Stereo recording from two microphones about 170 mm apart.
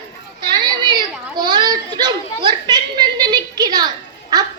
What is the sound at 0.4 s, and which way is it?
Children playing, 25° right (ahead or behind).